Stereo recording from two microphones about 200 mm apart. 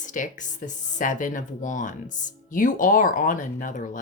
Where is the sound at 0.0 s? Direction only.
40° left (ahead or behind).